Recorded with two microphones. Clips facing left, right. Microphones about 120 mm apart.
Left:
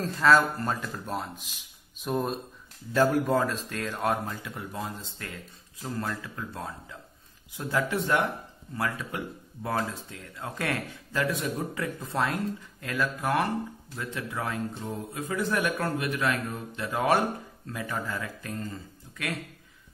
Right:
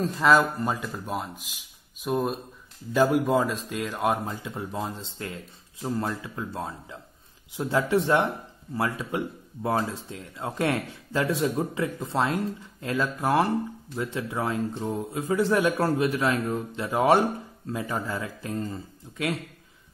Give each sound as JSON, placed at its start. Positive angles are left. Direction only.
{"t": 0.0, "sound": "a man's voice", "side_deg": -15}